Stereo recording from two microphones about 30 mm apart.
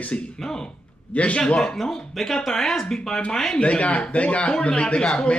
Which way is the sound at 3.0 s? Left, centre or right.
Left.